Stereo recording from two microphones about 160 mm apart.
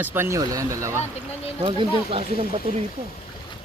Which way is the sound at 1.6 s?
35° right (ahead or behind).